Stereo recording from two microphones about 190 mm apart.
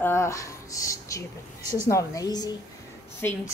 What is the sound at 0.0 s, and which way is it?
A woman's voice, 15° left (ahead or behind).